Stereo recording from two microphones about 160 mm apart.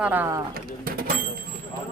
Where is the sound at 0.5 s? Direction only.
65° right (ahead or behind).